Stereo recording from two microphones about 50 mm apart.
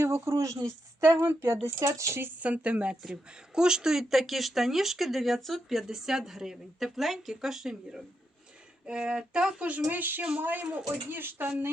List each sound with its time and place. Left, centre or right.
0.0 s speech: right
1.1 s speech: right
1.6 s speech: right
2.4 s speech: right
9.9 s speech: right